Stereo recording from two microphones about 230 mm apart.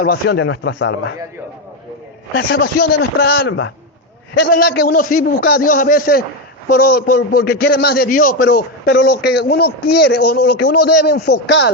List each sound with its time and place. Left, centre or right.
0.1 s a man's voice: left
2.3 s a man's voice: left